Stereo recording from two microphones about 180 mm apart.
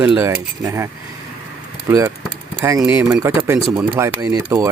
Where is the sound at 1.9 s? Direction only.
15° right (ahead or behind).